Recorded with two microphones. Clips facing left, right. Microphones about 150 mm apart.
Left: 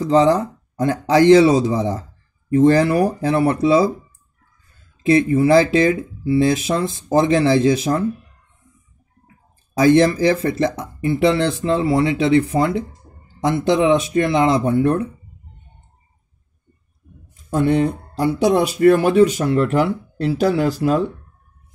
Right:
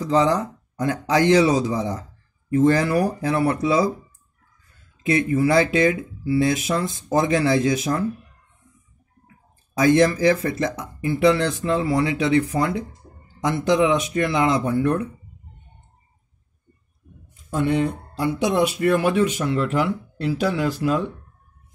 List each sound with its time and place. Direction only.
0.0 s speech: 30° left (ahead or behind)
5.0 s speech: 25° left (ahead or behind)
9.8 s speech: 30° left (ahead or behind)
17.5 s speech: 40° left (ahead or behind)